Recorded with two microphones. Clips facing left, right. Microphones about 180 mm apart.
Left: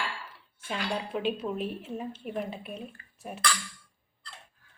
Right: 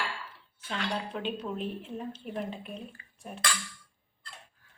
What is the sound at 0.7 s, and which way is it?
Speech, 10° left (ahead or behind).